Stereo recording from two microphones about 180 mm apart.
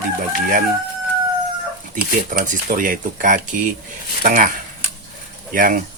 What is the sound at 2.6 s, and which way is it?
Speech, 50° right (ahead or behind).